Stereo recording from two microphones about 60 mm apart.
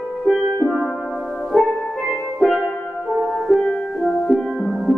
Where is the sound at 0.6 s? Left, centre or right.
Centre.